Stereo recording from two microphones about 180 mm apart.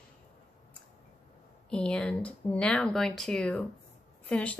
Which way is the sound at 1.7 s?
5° left (ahead or behind).